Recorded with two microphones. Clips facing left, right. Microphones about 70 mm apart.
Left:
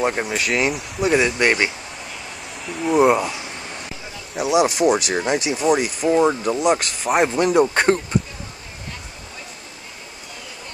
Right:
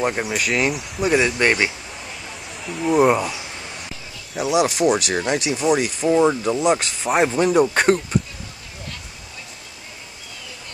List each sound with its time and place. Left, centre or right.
0.0 s speech: centre
2.7 s speech: centre
4.4 s speech: left
5.6 s speech: centre
6.1 s speech: centre